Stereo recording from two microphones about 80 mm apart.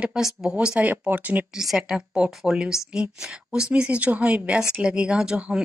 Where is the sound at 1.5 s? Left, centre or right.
Centre.